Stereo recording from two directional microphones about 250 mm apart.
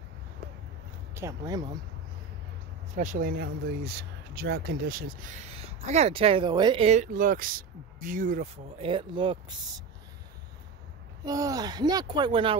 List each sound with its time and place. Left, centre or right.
1.1 s speech: centre
2.9 s speech: right
11.2 s speech: centre